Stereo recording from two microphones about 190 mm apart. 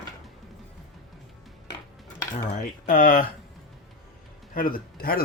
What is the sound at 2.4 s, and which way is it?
Speech, 45° left (ahead or behind).